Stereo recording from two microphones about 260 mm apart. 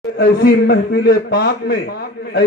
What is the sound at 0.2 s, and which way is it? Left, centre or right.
A man's voice, left.